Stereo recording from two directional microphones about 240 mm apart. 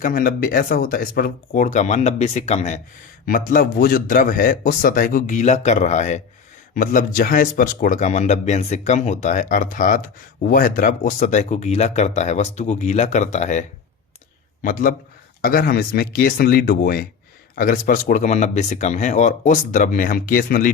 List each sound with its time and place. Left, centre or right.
0.0 s speech: left